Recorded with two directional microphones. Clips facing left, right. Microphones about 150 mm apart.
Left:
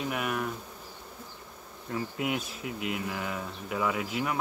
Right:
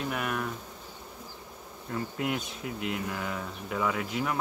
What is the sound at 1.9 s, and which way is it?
Speech, 5° left (ahead or behind).